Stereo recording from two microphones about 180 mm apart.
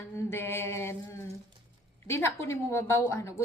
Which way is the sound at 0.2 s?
15° left (ahead or behind).